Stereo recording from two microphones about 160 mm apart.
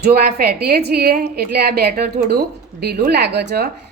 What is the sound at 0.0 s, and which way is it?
A woman's voice, 80° right.